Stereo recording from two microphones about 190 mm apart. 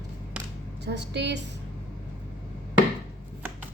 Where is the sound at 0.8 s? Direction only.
65° right (ahead or behind).